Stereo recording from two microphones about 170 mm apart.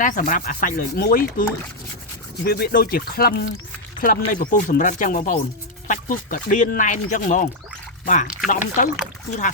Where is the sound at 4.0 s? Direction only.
55° left (ahead or behind).